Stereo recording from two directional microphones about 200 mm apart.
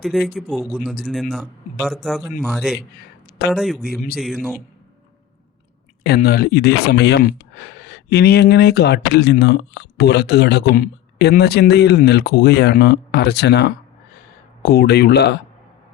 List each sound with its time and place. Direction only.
0.0 s speech: centre (ahead or behind)
6.0 s speech: 50° left (ahead or behind)